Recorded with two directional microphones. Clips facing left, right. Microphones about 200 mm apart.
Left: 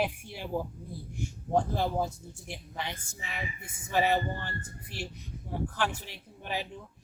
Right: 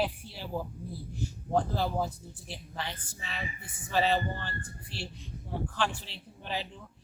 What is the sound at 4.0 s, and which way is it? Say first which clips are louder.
Speech: left 1 dB; 15° left (ahead or behind).